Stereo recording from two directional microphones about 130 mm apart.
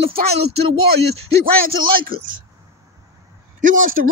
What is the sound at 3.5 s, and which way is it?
Speech, 90° right.